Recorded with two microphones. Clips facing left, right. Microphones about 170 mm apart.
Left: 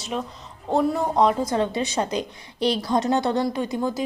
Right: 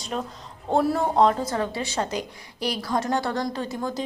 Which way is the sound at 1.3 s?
10° left (ahead or behind).